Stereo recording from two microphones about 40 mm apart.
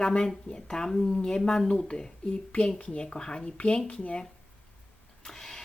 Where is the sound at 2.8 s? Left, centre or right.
Left.